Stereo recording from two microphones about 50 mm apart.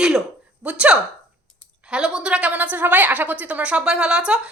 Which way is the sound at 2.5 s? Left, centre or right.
Right.